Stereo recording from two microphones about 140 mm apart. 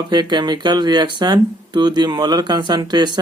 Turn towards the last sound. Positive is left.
turn(degrees=-30)  # may be behind; listen again after turning